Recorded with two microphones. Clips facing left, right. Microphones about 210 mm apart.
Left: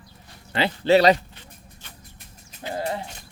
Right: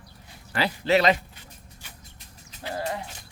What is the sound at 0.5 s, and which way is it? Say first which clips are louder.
Speech: left 4 dB; 30° left (ahead or behind).